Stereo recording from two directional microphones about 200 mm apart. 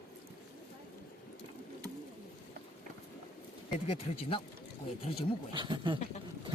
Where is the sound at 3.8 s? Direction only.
30° left (ahead or behind).